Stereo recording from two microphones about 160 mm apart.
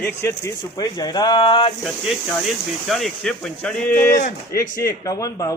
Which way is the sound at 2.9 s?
Centre (ahead or behind).